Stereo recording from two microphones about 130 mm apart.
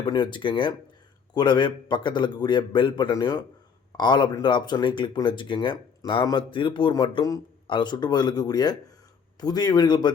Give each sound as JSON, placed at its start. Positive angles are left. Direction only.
{"t": 0.0, "sound": "speech", "side_deg": 35}